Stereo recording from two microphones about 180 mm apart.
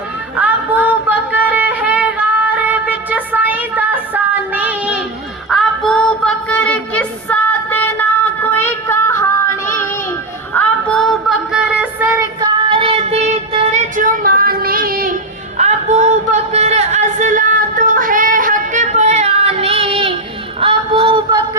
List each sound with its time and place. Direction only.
0.3 s a sound: 10° right (ahead or behind)
5.5 s music: centre (ahead or behind)
10.5 s music: 10° left (ahead or behind); by 12.2 s 10° right (ahead or behind)
12.4 s child singing: 30° right (ahead or behind); by 15.1 s 55° right (ahead or behind)
15.5 s music: 40° right (ahead or behind)
20.6 s a sound: 30° right (ahead or behind)